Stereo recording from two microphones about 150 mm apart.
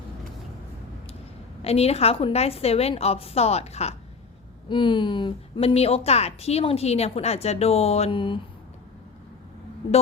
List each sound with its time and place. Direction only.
1.6 s a woman's voice: 45° left (ahead or behind)
4.7 s a woman's voice: 30° left (ahead or behind)